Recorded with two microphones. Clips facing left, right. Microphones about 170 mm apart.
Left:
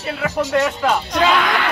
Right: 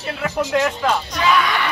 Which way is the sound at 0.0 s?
5° left (ahead or behind).